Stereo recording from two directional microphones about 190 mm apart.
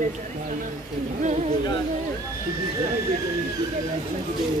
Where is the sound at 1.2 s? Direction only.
40° right (ahead or behind).